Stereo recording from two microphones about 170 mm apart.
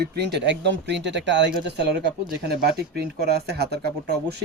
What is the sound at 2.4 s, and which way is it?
A man's voice, 70° right (ahead or behind).